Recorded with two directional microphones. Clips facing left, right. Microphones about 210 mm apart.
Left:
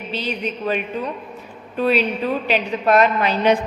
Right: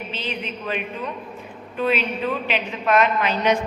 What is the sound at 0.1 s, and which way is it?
A woman's voice, 40° left (ahead or behind).